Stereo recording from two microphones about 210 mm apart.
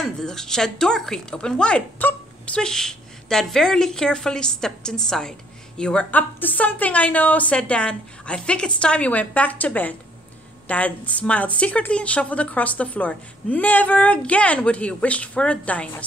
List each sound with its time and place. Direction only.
0.0 s speech: centre (ahead or behind)